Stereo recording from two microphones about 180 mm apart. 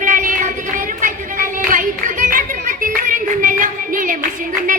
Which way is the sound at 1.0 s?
45° right (ahead or behind).